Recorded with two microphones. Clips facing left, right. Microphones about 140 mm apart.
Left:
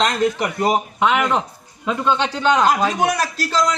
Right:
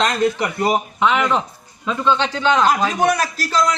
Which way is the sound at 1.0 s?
10° left (ahead or behind).